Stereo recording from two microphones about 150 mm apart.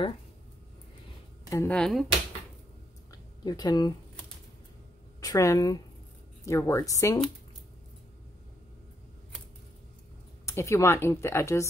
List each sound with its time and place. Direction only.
1.5 s speech: 15° left (ahead or behind)
1.8 s speech: centre (ahead or behind)
3.1 s a sound: 25° left (ahead or behind)
5.2 s a woman's voice: 20° left (ahead or behind)
10.4 s speech: 20° left (ahead or behind)